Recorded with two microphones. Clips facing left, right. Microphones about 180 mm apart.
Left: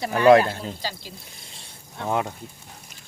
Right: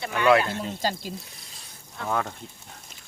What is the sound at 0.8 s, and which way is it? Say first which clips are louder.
Speech: right 5 dB; 45° right (ahead or behind).